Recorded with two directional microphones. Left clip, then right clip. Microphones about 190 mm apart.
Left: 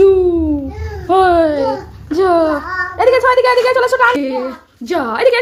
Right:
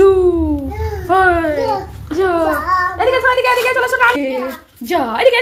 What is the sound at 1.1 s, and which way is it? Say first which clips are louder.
Babbling: left 2 dB; 35° left (ahead or behind).